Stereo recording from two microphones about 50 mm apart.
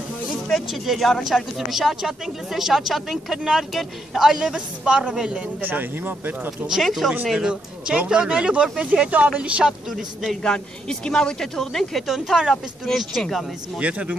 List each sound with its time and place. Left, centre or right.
0.5 s speech: centre
5.6 s speech: right
6.7 s speech: centre
7.3 s speech: centre
9.7 s speech: centre
10.4 s speech: centre
12.1 s speech: centre
13.7 s speech: right